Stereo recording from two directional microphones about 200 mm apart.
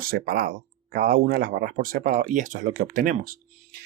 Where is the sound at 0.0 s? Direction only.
45° right (ahead or behind).